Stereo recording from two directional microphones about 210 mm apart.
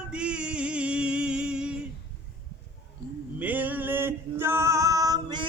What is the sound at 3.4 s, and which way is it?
Music, 10° right (ahead or behind).